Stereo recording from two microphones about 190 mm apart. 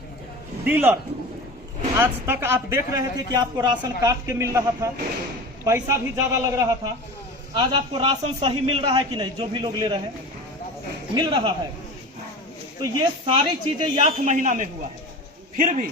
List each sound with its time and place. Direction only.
0.6 s a man's voice: 10° right (ahead or behind)
2.0 s a man's voice: 10° right (ahead or behind)
11.1 s a man's voice: 25° right (ahead or behind)
12.8 s a man's voice: 25° right (ahead or behind)
14.0 s a man's voice: 40° right (ahead or behind)